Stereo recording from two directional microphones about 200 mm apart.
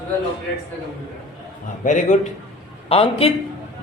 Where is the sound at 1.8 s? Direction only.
40° left (ahead or behind).